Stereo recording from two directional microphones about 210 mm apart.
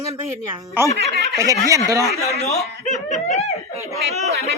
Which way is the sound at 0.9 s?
55° right (ahead or behind).